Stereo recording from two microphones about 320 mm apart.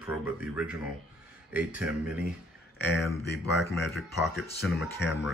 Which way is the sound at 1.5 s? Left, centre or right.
Centre.